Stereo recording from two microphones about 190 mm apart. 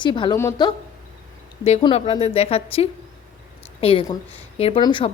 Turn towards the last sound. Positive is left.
turn(degrees=25)  # may be behind; listen again after turning